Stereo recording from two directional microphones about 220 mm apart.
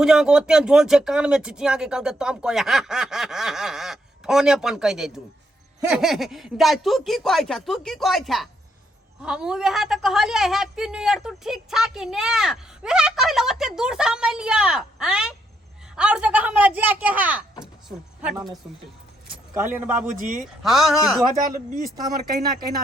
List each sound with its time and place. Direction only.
0.0 s a woman's voice: centre (ahead or behind)
17.6 s a sound: 5° right (ahead or behind)
19.5 s speech: 10° right (ahead or behind)
20.1 s speech: 35° right (ahead or behind)
20.6 s a woman's voice: centre (ahead or behind)
21.5 s speech: 35° right (ahead or behind)